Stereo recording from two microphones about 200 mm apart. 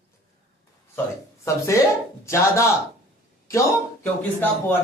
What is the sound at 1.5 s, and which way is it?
Speech, 15° left (ahead or behind).